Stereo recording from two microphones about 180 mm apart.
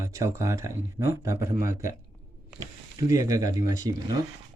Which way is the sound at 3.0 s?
20° right (ahead or behind).